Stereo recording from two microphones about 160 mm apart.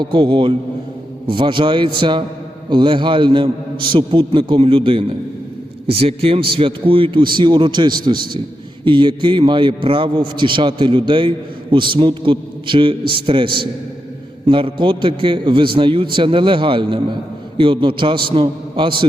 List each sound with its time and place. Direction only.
0.0 s a man's voice: 30° right (ahead or behind)